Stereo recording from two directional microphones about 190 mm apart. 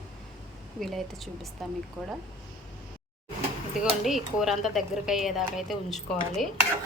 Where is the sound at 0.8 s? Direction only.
Centre (ahead or behind).